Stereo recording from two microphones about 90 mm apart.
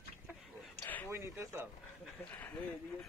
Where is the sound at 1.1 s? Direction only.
30° right (ahead or behind).